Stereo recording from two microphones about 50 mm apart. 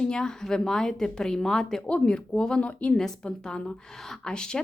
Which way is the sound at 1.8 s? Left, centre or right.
Left.